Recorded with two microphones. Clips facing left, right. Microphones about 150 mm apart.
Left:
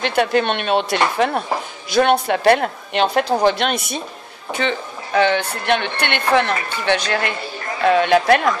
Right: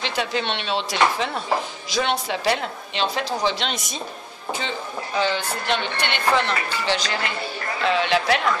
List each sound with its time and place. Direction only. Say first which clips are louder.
0.0 s a woman's voice: left 8 dB; 55° left (ahead or behind)